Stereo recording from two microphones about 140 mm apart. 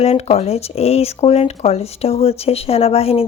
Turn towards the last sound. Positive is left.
turn(degrees=45)  # may be behind; listen again after turning